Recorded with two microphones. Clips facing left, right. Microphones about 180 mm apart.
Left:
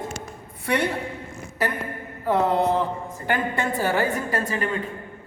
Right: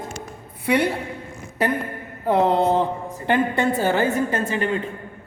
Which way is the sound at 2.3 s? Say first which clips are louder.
Right 3 dB; 25° right (ahead or behind).